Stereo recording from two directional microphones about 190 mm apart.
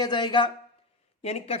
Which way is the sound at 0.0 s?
25° left (ahead or behind).